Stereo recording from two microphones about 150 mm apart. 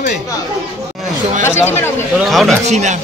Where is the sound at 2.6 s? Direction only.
50° right (ahead or behind).